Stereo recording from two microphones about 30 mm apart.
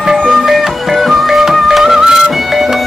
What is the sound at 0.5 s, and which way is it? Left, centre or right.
Music, centre.